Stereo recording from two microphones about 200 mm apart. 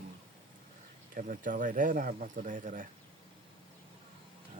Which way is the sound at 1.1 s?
40° right (ahead or behind).